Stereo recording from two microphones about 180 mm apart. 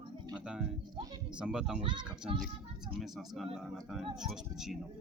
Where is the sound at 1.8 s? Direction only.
25° right (ahead or behind).